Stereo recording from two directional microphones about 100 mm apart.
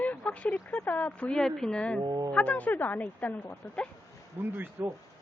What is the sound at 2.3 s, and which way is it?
Speech, 15° left (ahead or behind).